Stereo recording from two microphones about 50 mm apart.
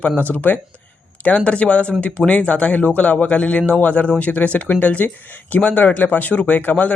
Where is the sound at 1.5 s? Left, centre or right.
Left.